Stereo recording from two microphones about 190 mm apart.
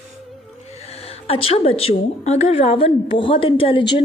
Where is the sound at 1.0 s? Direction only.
30° left (ahead or behind).